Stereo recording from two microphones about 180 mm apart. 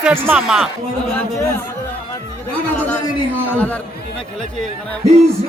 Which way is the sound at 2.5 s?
10° left (ahead or behind).